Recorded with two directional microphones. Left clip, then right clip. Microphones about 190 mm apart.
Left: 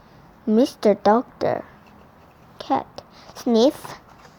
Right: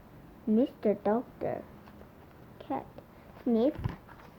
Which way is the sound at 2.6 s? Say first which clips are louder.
Left 14 dB; 30° left (ahead or behind).